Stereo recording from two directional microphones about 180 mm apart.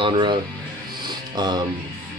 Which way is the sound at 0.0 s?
25° right (ahead or behind).